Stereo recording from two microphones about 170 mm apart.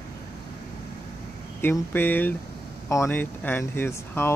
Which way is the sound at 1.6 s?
10° left (ahead or behind).